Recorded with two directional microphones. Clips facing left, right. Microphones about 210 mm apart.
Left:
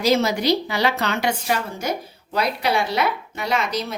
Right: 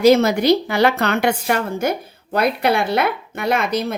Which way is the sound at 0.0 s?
55° right (ahead or behind).